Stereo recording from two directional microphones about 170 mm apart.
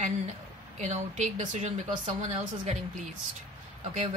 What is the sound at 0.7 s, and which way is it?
Speech, 45° right (ahead or behind).